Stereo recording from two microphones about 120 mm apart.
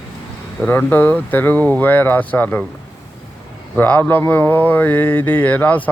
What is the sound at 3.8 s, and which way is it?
Mantra, 15° left (ahead or behind).